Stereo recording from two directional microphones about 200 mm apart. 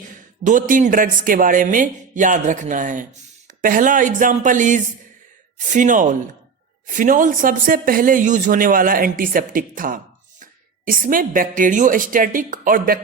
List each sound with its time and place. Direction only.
0.4 s a woman's voice: 40° right (ahead or behind)